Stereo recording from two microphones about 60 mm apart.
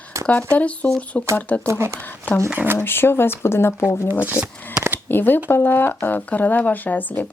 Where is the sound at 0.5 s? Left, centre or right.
Left.